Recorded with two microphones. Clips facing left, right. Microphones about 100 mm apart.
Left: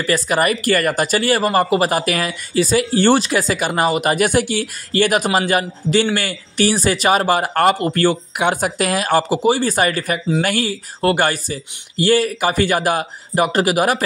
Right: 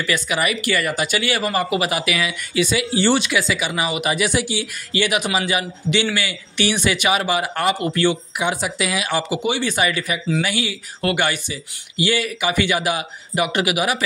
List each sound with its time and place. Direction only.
0.0 s speech: 40° left (ahead or behind)